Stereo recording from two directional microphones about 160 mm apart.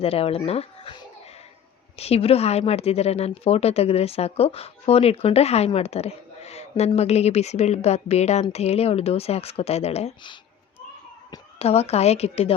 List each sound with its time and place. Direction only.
0.0 s speech: 40° left (ahead or behind)
2.0 s speech: 40° left (ahead or behind)
11.6 s speech: 40° left (ahead or behind)